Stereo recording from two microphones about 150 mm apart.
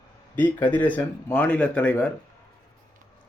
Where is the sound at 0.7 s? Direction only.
10° left (ahead or behind).